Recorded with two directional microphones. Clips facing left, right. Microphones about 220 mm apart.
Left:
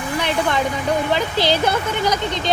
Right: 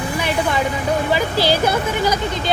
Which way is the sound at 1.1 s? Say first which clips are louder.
Right 1 dB; 10° right (ahead or behind).